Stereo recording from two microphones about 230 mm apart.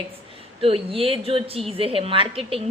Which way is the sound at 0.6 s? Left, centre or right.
Right.